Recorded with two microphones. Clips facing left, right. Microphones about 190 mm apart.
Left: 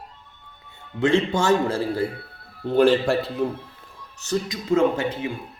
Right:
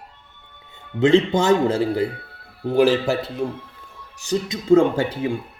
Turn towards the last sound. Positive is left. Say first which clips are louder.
# right 1 dB
turn(degrees=-35)  # may be behind; listen again after turning